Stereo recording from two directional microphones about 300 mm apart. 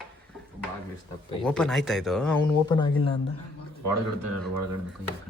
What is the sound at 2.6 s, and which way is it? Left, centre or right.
Speech, centre.